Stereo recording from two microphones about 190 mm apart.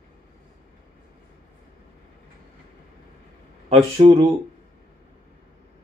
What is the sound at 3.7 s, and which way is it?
Speech, 30° right (ahead or behind).